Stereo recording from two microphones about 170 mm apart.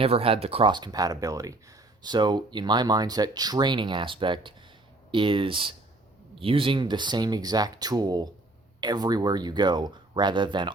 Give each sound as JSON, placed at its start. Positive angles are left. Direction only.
{"t": 0.0, "sound": "speech", "side_deg": -35}